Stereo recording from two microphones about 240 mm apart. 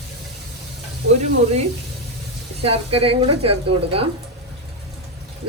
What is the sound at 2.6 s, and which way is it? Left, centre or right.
Speech, right.